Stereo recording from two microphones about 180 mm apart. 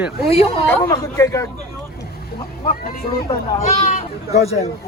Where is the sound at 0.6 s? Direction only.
15° left (ahead or behind).